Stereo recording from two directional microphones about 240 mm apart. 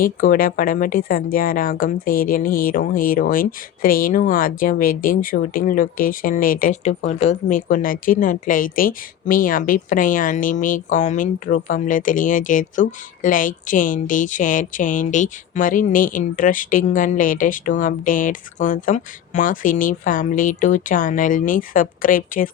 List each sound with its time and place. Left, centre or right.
0.0 s a woman's voice: left